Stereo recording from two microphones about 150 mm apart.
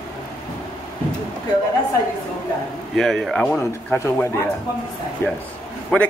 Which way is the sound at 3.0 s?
Centre (ahead or behind).